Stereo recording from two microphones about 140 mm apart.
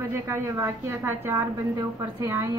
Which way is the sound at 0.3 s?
20° right (ahead or behind).